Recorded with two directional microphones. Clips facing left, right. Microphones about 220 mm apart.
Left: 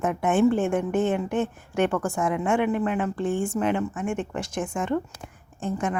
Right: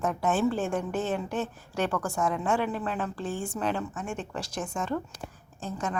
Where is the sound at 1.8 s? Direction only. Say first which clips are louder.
Left 5 dB; 25° left (ahead or behind).